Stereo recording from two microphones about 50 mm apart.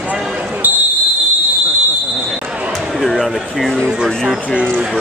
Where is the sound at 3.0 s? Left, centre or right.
Centre.